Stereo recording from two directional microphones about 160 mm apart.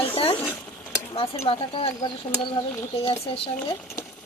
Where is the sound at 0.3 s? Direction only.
10° left (ahead or behind).